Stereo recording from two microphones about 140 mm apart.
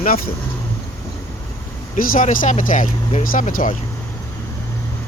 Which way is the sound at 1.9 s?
75° left (ahead or behind).